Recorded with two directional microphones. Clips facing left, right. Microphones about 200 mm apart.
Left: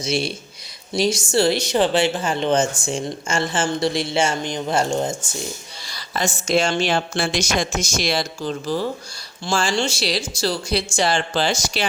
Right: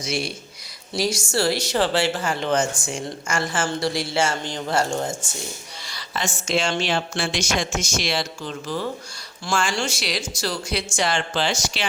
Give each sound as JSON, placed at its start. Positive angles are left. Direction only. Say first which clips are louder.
{"t": 0.0, "sound": "speech", "louder": "left 4 dB", "side_deg": 25}
{"t": 5.8, "sound": "speech", "louder": "left 4 dB", "side_deg": 40}